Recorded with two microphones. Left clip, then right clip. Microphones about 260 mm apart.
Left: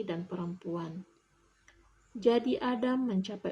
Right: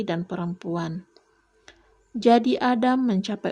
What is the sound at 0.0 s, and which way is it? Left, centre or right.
Speech, right.